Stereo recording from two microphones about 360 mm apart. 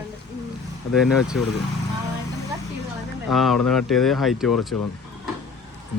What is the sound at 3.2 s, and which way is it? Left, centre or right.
Speech, centre.